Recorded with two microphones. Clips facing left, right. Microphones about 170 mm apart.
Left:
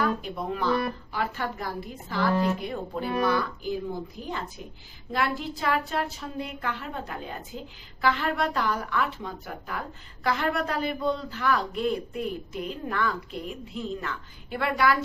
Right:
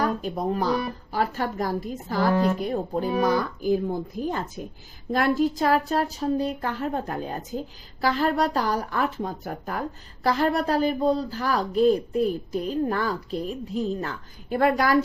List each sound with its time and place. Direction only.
0.0 s speech: 40° right (ahead or behind)